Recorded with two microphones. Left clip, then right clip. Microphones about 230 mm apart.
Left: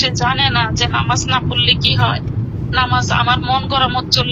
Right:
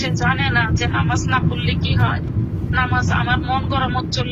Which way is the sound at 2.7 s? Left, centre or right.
Left.